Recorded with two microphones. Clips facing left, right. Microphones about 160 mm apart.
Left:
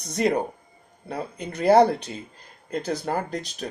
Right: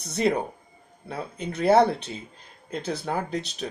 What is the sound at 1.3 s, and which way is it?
Speech, 60° left (ahead or behind).